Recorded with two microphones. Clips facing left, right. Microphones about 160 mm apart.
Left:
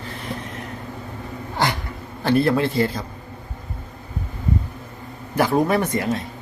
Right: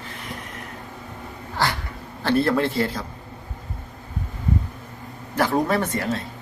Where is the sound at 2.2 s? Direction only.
15° left (ahead or behind).